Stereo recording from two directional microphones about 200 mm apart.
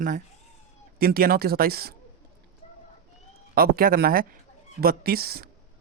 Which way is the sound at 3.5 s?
45° right (ahead or behind).